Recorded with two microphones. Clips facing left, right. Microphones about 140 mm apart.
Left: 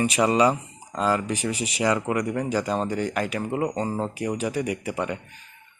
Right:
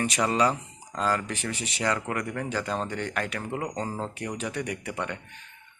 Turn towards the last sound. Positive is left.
turn(degrees=10)  # may be behind; listen again after turning